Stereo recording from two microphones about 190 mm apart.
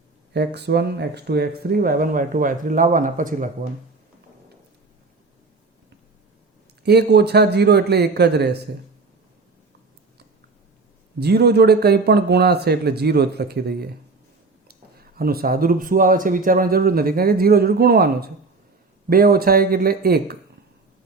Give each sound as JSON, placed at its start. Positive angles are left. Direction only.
{"t": 0.3, "sound": "speech", "side_deg": -60}
{"t": 6.8, "sound": "speech", "side_deg": -60}
{"t": 11.2, "sound": "speech", "side_deg": -60}